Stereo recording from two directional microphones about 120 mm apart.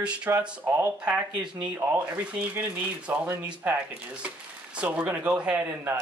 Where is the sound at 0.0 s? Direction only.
10° right (ahead or behind).